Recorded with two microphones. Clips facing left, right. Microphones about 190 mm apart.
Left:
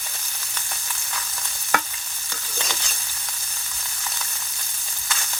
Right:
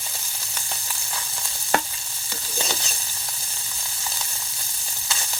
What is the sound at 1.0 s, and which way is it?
Stir, 25° right (ahead or behind).